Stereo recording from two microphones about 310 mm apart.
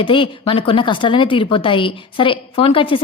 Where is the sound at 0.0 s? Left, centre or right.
Centre.